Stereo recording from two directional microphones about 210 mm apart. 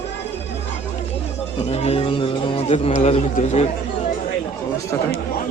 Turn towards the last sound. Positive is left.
turn(degrees=10)  # may be behind; listen again after turning